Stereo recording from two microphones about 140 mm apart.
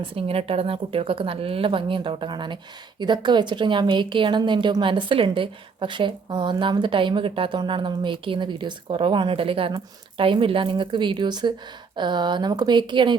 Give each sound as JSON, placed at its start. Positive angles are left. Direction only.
{"t": 0.0, "sound": "a woman's voice", "side_deg": -40}